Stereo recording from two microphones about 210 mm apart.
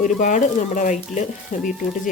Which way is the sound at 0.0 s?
40° left (ahead or behind).